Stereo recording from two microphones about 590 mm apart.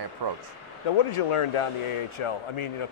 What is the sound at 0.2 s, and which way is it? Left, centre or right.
Speech, right.